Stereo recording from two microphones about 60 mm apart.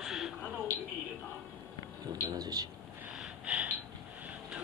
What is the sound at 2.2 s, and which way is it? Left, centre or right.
Speech, right.